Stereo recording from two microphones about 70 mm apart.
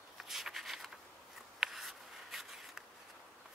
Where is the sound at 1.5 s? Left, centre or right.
Centre.